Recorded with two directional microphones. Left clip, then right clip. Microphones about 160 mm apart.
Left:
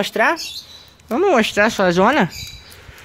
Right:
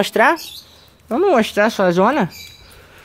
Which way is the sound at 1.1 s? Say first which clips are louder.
Even; 10° right (ahead or behind).